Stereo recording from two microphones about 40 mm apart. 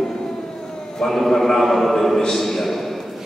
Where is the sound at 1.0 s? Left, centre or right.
Centre.